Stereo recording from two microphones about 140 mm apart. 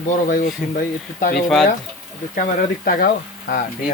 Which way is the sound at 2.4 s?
80° left.